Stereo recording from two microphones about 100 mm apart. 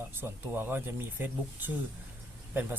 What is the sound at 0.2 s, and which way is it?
Speech, 25° right (ahead or behind).